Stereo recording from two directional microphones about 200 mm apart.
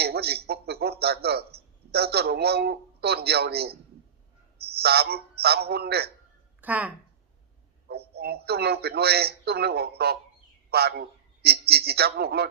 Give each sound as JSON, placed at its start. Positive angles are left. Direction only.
{"t": 0.0, "sound": "a sound", "side_deg": -55}
{"t": 1.9, "sound": "a man's voice", "side_deg": -55}
{"t": 4.8, "sound": "a man's voice", "side_deg": -55}
{"t": 6.6, "sound": "speech", "side_deg": -10}
{"t": 7.9, "sound": "a man's voice", "side_deg": -55}